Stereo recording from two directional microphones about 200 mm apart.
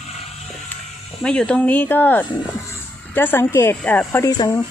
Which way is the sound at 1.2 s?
5° left (ahead or behind).